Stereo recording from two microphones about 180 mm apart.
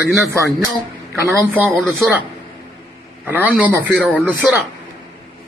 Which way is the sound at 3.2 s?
10° right (ahead or behind).